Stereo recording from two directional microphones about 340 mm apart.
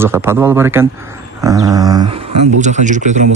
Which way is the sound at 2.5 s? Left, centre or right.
Right.